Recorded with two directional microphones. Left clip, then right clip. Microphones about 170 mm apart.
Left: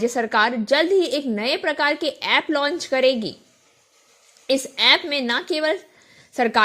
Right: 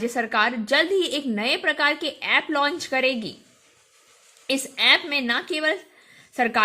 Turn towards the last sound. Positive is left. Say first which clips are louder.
# left 2 dB
turn(degrees=30)  # may be behind; listen again after turning